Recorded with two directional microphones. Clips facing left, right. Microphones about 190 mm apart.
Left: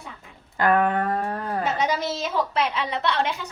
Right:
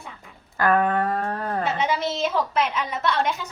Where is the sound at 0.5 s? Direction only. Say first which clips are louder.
Even; 20° left (ahead or behind).